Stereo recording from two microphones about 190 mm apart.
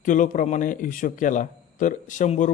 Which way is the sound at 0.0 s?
45° left (ahead or behind).